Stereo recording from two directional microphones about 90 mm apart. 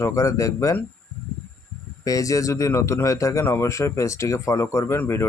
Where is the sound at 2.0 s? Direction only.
40° left (ahead or behind).